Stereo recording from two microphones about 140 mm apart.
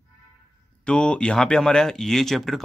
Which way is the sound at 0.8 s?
5° left (ahead or behind).